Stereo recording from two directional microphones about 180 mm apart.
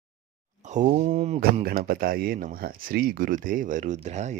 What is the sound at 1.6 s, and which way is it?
Speech, 55° right (ahead or behind).